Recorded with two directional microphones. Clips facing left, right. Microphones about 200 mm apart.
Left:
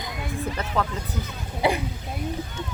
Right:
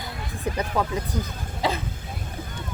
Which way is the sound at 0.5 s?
15° right (ahead or behind).